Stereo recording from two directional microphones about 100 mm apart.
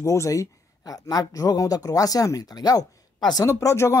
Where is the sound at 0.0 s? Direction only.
30° left (ahead or behind).